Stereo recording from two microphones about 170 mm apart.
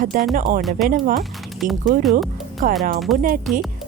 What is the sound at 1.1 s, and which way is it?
Speech, centre (ahead or behind).